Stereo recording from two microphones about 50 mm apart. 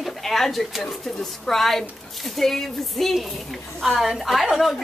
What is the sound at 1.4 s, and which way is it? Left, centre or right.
A woman's voice, centre.